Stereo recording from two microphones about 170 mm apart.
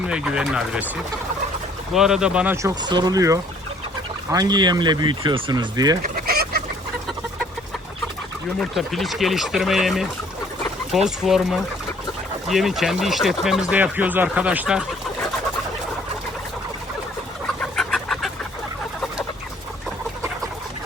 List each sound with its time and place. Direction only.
0.1 s speech: 5° right (ahead or behind)
1.9 s speech: 5° right (ahead or behind)
2.6 s speech: 20° right (ahead or behind)
6.0 s fowl: 60° right (ahead or behind)
8.6 s speech: centre (ahead or behind)
17.6 s chicken: centre (ahead or behind)